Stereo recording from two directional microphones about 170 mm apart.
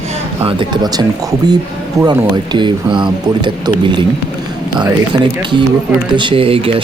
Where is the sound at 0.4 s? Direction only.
30° right (ahead or behind).